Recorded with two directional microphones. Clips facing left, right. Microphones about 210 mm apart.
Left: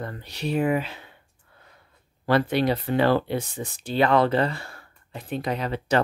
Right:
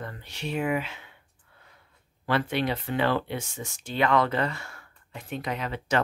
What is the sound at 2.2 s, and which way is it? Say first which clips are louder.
Speech: left 5 dB; 40° left (ahead or behind).